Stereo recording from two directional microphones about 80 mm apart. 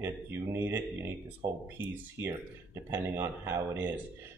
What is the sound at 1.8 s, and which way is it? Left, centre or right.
Speech, right.